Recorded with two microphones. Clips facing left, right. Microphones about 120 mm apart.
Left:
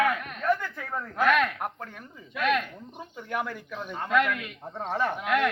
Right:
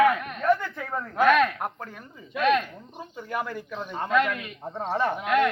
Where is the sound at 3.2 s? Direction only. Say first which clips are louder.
Right 1 dB; 10° right (ahead or behind).